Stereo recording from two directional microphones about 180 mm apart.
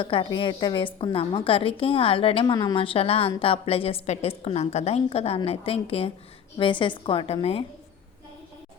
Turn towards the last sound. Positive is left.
turn(degrees=30)  # may be behind; listen again after turning